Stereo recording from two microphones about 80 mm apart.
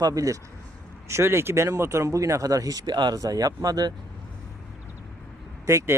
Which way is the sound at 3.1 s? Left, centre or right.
Right.